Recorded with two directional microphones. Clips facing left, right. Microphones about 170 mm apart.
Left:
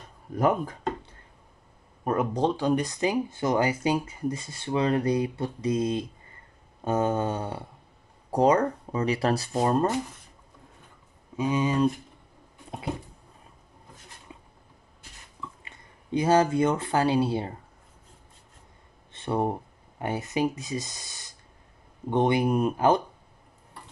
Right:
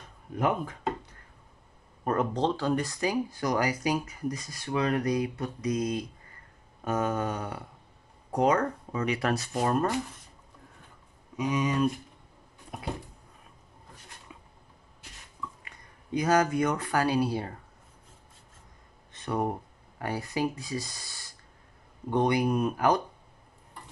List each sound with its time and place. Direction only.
0.4 s speech: 40° left (ahead or behind)
2.0 s speech: 10° left (ahead or behind)
11.3 s speech: 30° left (ahead or behind)
15.6 s speech: 25° left (ahead or behind)
19.1 s speech: 25° left (ahead or behind)